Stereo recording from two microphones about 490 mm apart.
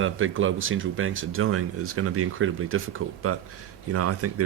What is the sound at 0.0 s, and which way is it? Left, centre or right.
Speech, right.